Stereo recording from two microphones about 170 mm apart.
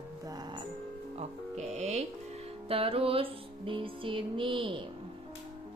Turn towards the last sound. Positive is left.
turn(degrees=-30)  # may be behind; listen again after turning